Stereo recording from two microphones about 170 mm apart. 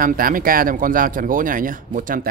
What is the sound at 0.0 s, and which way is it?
Speech, 55° right (ahead or behind).